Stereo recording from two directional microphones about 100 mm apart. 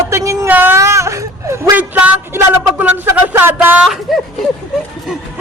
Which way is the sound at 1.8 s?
15° right (ahead or behind).